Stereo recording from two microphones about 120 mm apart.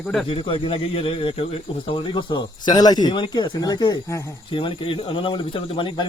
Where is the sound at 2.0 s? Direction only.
40° left (ahead or behind).